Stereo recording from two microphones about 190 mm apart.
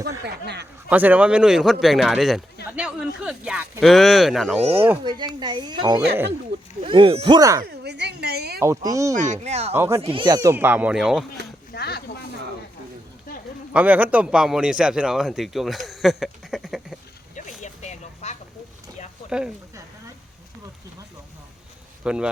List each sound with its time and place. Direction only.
0.4 s speech: 60° right (ahead or behind)
0.9 s a man's voice: 10° right (ahead or behind)
5.0 s speech: 25° right (ahead or behind)
6.8 s speech: 30° right (ahead or behind)
7.6 s a sound: 60° right (ahead or behind)
8.6 s speech: 15° right (ahead or behind)
9.1 s speech: 40° right (ahead or behind)
9.7 s speech: 10° right (ahead or behind)
10.0 s speech: 30° right (ahead or behind); by 11.3 s centre (ahead or behind)
11.7 s a sound: 55° left (ahead or behind)
13.7 s a man's voice: 10° right (ahead or behind)
17.6 s a sound: 40° left (ahead or behind)
19.3 s speech: 5° right (ahead or behind)
22.0 s speech: 5° right (ahead or behind)